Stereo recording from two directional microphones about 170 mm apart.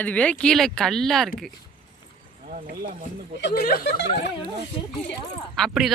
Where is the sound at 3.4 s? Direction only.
80° left; by 3.9 s 65° left (ahead or behind).